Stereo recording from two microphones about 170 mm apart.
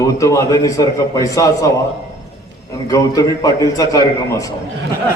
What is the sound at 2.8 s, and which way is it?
A man's voice, 20° left (ahead or behind).